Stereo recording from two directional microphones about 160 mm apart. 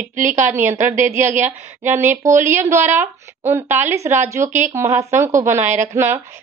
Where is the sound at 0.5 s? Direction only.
10° right (ahead or behind).